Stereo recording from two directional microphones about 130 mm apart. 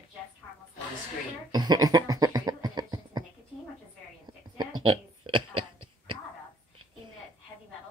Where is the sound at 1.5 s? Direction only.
30° right (ahead or behind).